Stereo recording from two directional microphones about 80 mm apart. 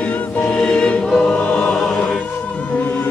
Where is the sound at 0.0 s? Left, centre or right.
Left.